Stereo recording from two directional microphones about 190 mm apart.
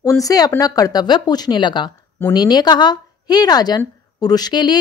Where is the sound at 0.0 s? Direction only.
20° left (ahead or behind).